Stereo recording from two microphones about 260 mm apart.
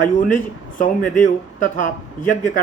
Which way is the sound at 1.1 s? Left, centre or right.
Left.